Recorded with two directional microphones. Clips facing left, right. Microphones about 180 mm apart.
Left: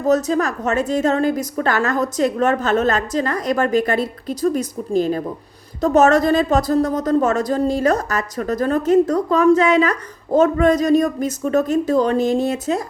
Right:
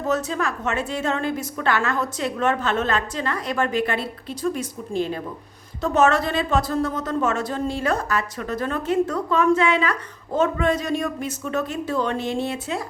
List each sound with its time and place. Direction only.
0.0 s a woman's voice: 40° left (ahead or behind)